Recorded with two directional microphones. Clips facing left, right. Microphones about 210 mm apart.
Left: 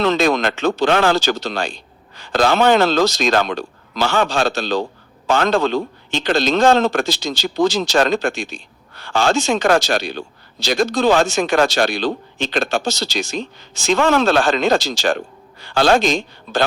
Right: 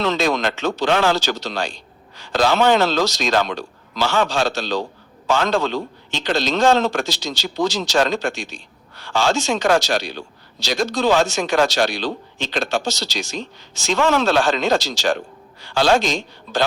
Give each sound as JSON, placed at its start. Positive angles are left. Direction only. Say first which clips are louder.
{"t": 0.0, "sound": "a man's voice", "louder": "left 3 dB", "side_deg": 55}